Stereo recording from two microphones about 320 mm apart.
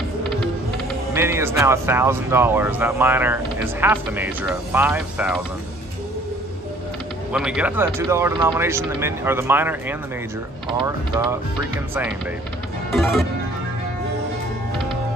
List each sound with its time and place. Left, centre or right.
1.1 s speech: centre
7.3 s speech: centre
12.9 s music: centre